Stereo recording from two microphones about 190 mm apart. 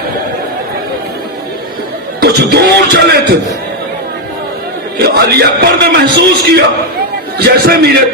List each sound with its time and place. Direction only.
2.2 s music: 60° right (ahead or behind)
4.9 s a man's voice: 55° right (ahead or behind)